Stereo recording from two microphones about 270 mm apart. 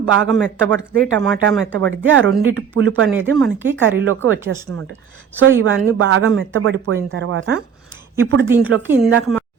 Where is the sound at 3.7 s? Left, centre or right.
Right.